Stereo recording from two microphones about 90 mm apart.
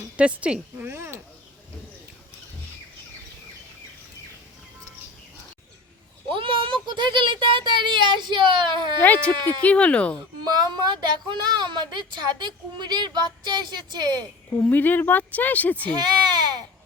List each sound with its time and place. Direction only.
0.2 s a woman's voice: 15° right (ahead or behind)
0.9 s speech: 30° right (ahead or behind)
6.3 s speech: 70° right (ahead or behind)
9.0 s speech: 20° left (ahead or behind)
10.4 s a woman's voice: 50° right (ahead or behind)
14.6 s speech: 20° left (ahead or behind)
16.0 s a sound: 50° right (ahead or behind)